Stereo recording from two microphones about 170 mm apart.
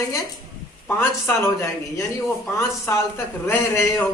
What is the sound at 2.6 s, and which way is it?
A man's voice, 15° left (ahead or behind).